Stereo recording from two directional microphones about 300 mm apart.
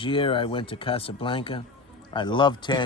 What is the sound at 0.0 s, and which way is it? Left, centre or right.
Speech, centre.